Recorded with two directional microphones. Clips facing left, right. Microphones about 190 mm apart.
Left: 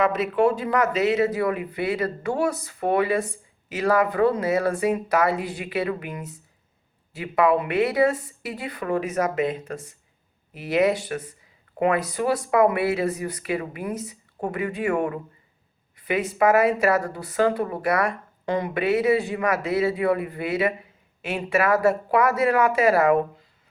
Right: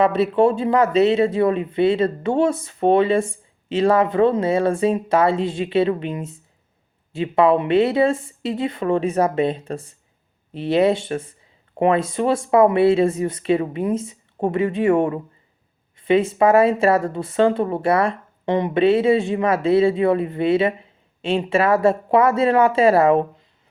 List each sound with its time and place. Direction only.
0.0 s speech: 30° right (ahead or behind)